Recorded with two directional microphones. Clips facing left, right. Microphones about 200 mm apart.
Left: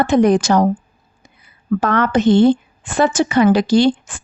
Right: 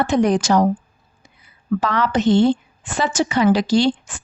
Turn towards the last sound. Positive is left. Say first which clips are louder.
# left 3 dB
turn(degrees=55)  # may be behind; listen again after turning